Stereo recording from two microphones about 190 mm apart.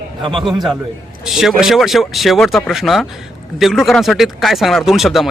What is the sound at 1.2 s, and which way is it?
Speech, centre (ahead or behind).